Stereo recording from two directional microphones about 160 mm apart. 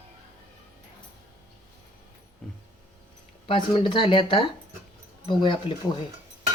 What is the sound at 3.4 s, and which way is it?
Speech, 35° left (ahead or behind).